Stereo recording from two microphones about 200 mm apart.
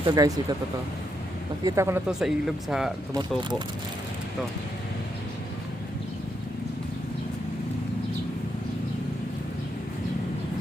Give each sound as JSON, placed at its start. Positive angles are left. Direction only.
{"t": 0.0, "sound": "speech", "side_deg": -20}
{"t": 1.6, "sound": "speech", "side_deg": -15}